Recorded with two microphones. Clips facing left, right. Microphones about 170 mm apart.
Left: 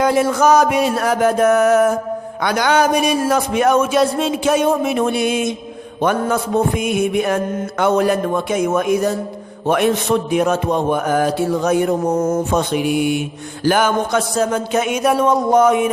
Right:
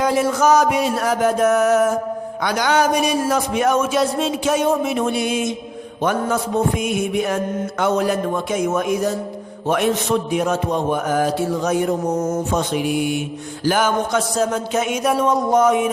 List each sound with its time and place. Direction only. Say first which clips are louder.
0.0 s mantra: left 3 dB; 60° left (ahead or behind)